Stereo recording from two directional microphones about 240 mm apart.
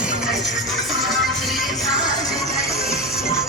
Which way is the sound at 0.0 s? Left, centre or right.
Centre.